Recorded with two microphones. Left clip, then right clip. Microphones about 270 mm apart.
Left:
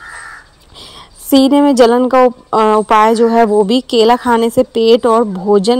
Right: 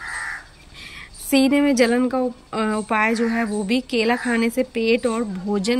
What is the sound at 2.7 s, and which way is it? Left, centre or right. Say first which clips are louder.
Speech: left 11 dB; left.